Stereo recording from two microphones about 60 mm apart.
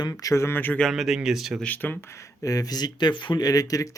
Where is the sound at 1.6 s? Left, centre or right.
Left.